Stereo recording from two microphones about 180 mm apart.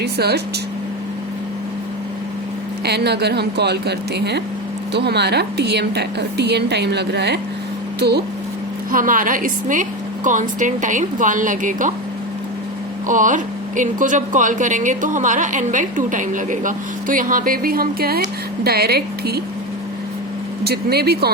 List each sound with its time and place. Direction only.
0.0 s speech: 65° right (ahead or behind)
2.8 s a woman's voice: 65° right (ahead or behind)
8.9 s speech: 50° right (ahead or behind)
13.1 s speech: 45° right (ahead or behind); by 19.4 s 60° right (ahead or behind)
20.7 s speech: 60° right (ahead or behind)